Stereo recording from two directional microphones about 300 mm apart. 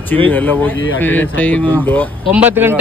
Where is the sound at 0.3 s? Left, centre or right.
Centre.